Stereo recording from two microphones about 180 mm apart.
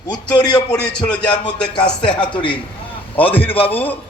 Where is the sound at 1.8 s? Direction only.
5° left (ahead or behind).